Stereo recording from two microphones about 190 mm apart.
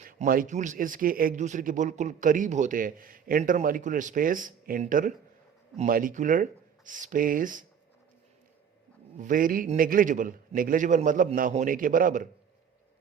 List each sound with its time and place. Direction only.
0.0 s a man's voice: 45° right (ahead or behind)
9.1 s a man's voice: 45° right (ahead or behind)